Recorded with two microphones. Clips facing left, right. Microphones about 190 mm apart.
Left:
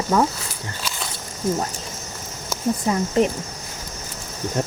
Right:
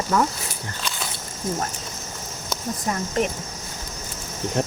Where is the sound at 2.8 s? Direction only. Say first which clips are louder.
Left 4 dB; 25° left (ahead or behind).